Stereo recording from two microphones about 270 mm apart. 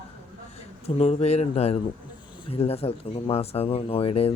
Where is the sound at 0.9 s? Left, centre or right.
Left.